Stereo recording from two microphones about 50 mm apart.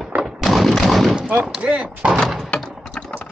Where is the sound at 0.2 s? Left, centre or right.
Centre.